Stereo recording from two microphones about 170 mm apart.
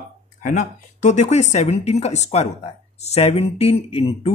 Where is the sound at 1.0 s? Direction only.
45° left (ahead or behind).